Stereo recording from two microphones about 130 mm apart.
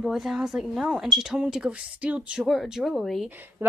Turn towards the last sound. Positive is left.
turn(degrees=-15)  # may be behind; listen again after turning